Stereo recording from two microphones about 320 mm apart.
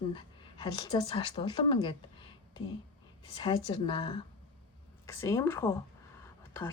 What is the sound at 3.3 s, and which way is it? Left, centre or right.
Speech, centre.